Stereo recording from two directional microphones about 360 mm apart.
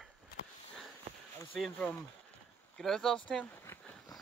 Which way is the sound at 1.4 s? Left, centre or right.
Centre.